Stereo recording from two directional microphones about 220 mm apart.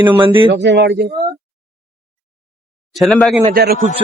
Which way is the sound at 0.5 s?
50° right (ahead or behind).